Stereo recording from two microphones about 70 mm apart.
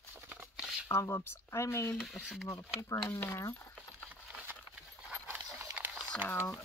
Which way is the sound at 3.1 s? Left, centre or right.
Left.